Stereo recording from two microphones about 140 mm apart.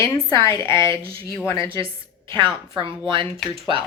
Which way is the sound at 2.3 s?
35° right (ahead or behind).